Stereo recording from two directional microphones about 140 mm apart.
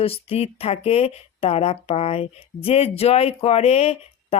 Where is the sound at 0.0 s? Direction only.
45° left (ahead or behind).